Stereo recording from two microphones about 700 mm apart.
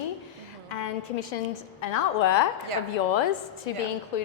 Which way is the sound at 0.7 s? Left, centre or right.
Left.